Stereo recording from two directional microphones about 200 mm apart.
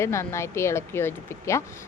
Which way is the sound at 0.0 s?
15° left (ahead or behind).